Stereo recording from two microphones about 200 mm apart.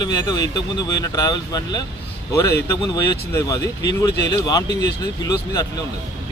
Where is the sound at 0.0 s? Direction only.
20° left (ahead or behind).